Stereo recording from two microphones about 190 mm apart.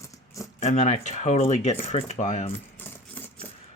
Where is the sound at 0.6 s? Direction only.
40° left (ahead or behind).